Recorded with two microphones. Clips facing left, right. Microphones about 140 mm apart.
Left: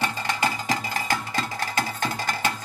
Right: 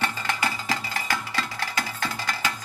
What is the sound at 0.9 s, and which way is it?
Music, 45° left (ahead or behind).